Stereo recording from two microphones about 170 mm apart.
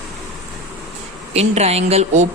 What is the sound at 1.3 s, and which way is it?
Speech, 40° right (ahead or behind).